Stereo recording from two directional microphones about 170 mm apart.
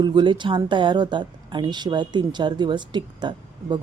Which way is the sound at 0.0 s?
25° right (ahead or behind).